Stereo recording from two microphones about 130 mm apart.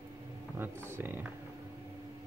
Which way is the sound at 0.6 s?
15° right (ahead or behind).